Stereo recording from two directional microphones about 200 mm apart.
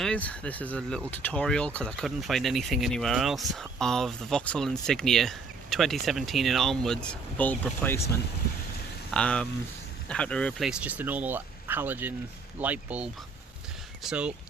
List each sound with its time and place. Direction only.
0.0 s speech: 5° left (ahead or behind)
9.1 s speech: 5° left (ahead or behind)